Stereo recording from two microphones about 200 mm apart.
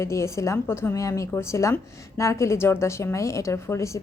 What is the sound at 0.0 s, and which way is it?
A woman's voice, 15° left (ahead or behind).